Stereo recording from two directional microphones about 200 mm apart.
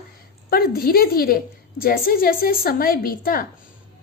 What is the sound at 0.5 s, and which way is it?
A woman's voice, 50° left (ahead or behind).